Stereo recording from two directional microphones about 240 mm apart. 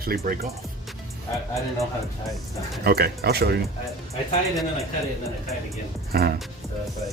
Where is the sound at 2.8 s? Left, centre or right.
Right.